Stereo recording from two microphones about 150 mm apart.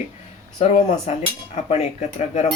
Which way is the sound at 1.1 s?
50° left (ahead or behind).